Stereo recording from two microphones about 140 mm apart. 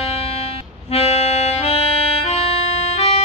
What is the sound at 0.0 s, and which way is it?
Music, 45° left (ahead or behind).